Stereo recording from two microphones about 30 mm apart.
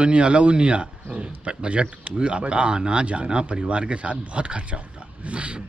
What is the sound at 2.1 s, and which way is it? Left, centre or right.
A man's voice, right.